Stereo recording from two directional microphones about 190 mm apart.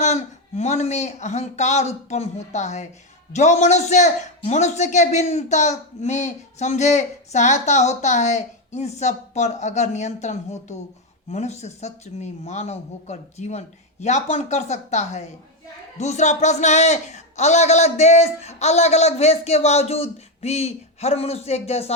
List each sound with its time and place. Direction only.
0.0 s a man's voice: 35° left (ahead or behind)